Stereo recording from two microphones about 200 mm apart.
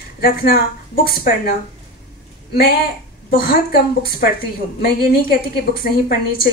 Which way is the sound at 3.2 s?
45° left (ahead or behind).